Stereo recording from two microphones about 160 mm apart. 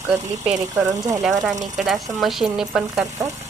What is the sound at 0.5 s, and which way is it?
Speech, 20° right (ahead or behind).